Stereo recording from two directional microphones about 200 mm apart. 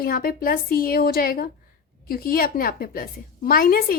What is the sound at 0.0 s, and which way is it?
A woman's voice, 45° left (ahead or behind).